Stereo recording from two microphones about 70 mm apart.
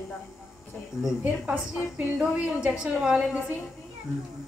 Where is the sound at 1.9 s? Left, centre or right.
Centre.